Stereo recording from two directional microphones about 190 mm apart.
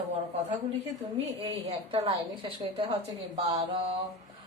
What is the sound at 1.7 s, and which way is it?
A woman's voice, 30° right (ahead or behind).